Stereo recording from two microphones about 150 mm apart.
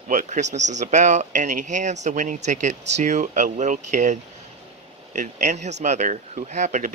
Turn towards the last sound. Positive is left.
turn(degrees=-50)  # may be behind; listen again after turning